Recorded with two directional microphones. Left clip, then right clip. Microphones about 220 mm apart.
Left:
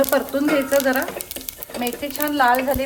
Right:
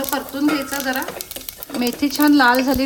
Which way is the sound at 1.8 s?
25° right (ahead or behind).